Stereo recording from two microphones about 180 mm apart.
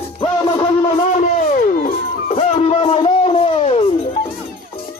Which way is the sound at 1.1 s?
45° left (ahead or behind).